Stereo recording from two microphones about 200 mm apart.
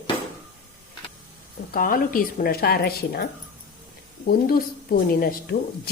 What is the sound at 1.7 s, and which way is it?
A woman's voice, 45° left (ahead or behind).